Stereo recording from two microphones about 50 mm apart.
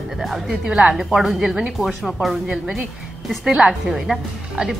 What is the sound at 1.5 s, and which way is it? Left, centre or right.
Speech, centre.